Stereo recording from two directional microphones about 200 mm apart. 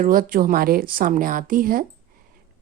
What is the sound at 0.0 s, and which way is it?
A woman's voice, 45° right (ahead or behind).